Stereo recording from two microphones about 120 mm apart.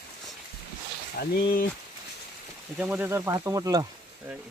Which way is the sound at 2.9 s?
15° right (ahead or behind).